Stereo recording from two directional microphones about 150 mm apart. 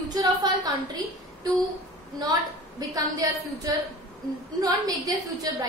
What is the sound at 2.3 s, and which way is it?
A woman's voice, 25° right (ahead or behind).